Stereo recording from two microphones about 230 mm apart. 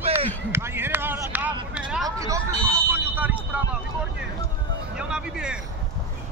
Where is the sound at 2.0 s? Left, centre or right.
Centre.